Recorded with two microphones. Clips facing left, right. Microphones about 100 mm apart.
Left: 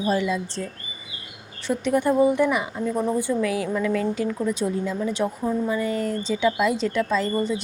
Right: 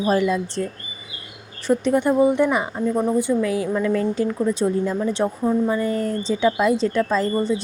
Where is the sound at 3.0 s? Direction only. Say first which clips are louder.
Right 3 dB; 20° right (ahead or behind).